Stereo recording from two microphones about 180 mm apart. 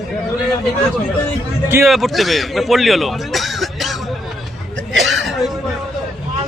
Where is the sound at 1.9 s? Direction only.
Centre (ahead or behind).